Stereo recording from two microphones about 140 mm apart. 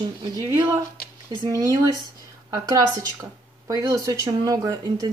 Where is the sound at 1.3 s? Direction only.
25° right (ahead or behind).